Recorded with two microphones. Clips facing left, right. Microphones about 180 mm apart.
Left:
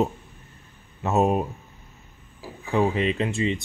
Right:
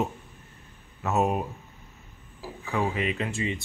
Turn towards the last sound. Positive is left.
turn(degrees=25)  # may be behind; listen again after turning